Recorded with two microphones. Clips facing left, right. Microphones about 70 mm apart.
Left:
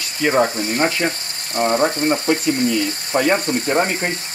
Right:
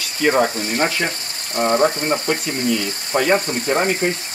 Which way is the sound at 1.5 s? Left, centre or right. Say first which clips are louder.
Right 1 dB; centre.